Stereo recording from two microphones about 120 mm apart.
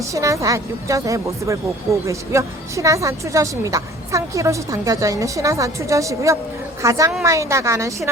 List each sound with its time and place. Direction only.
0.1 s a woman's voice: 25° right (ahead or behind)